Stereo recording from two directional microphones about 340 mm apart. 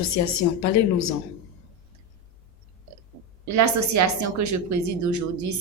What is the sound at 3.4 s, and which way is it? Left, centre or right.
Speech, right.